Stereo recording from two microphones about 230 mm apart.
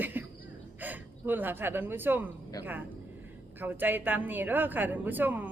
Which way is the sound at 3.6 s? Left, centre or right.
Centre.